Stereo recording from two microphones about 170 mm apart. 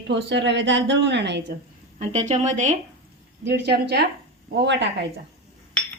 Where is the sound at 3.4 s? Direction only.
75° right (ahead or behind).